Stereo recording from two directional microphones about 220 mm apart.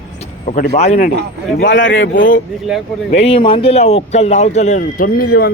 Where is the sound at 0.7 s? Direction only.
30° left (ahead or behind).